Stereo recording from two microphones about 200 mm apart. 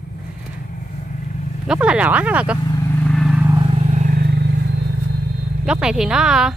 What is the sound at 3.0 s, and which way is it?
Vehicle, 5° left (ahead or behind).